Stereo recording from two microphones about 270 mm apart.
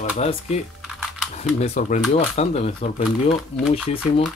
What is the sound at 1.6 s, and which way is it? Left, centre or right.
Speech, left.